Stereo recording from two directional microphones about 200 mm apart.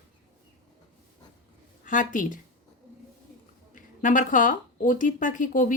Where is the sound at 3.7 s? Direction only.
40° left (ahead or behind).